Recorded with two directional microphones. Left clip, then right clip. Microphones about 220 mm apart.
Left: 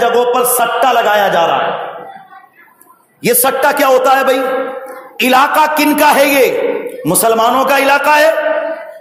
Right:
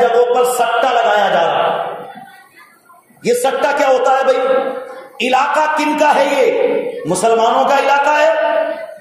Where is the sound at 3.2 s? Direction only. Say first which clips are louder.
Left 2 dB; 50° left (ahead or behind).